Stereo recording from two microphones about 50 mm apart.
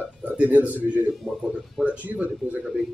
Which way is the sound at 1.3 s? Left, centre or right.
Centre.